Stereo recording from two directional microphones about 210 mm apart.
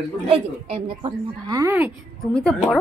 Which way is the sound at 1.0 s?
20° right (ahead or behind).